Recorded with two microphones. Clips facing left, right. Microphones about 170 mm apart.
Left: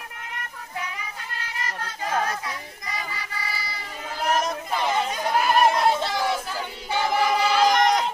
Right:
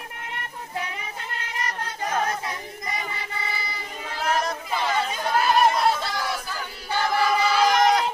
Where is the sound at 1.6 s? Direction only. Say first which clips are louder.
Right 1 dB; 20° right (ahead or behind).